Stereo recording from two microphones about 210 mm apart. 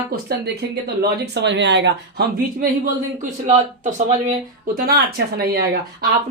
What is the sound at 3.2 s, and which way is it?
Speech, 35° right (ahead or behind).